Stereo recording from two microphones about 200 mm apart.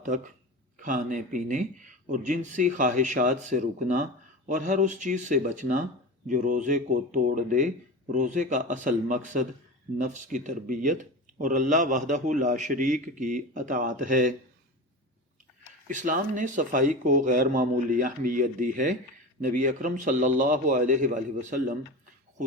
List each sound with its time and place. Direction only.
0.0 s speech: 40° right (ahead or behind)
15.9 s speech: 40° right (ahead or behind)